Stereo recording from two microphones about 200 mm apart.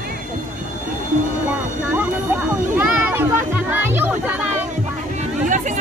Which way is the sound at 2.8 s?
10° right (ahead or behind).